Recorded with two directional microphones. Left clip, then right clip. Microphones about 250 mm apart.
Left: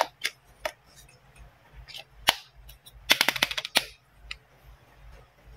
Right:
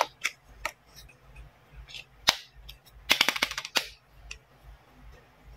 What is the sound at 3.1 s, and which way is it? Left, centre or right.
Music, centre.